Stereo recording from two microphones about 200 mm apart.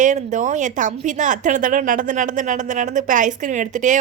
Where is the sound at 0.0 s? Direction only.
40° right (ahead or behind).